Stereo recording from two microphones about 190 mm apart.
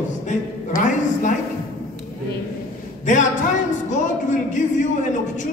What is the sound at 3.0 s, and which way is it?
A man's voice, 40° left (ahead or behind).